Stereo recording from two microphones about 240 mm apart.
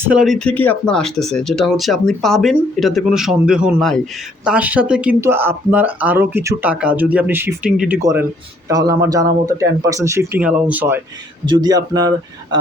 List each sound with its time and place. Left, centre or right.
0.1 s speech: centre
11.4 s speech: centre